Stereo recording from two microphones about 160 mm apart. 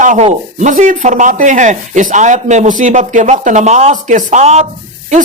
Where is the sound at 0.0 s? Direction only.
50° right (ahead or behind).